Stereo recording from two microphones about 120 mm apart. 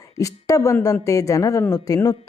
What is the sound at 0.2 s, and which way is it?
Speech, 25° left (ahead or behind).